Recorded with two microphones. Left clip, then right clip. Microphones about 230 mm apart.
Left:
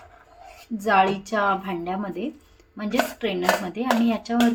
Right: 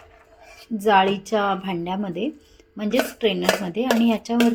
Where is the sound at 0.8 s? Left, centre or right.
Right.